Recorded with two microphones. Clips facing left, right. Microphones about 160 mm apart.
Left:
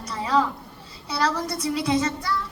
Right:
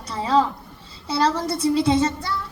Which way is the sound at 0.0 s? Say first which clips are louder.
Right 3 dB; 30° right (ahead or behind).